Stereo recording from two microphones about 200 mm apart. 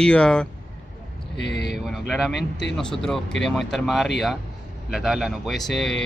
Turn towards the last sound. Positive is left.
turn(degrees=0)  # may be behind; listen again after turning